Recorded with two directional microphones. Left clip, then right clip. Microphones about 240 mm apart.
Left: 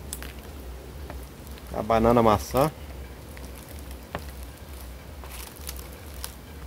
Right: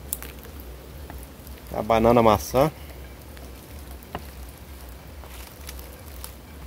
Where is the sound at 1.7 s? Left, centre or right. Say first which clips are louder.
Right 2 dB; right.